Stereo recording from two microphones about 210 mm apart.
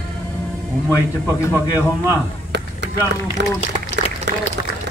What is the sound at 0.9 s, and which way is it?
Speech, 10° left (ahead or behind).